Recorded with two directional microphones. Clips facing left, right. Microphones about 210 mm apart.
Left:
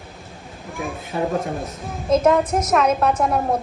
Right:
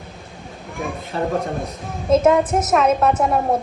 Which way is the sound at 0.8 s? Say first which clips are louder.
Even; centre (ahead or behind).